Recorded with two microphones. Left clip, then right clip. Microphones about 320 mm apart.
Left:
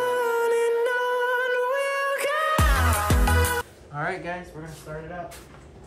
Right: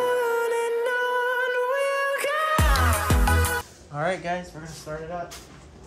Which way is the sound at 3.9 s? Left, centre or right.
Centre.